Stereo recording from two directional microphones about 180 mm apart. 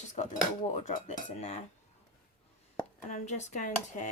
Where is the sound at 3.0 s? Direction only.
40° left (ahead or behind).